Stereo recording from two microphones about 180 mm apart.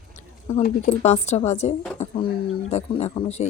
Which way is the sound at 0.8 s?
35° left (ahead or behind).